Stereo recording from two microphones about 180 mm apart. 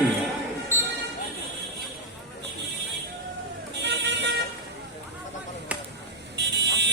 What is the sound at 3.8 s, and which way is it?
Vehicle, 75° right (ahead or behind).